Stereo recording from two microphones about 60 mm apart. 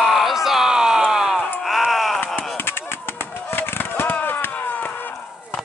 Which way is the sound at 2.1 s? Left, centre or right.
Left.